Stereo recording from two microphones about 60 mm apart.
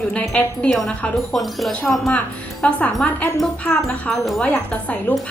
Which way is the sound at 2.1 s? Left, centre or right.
Left.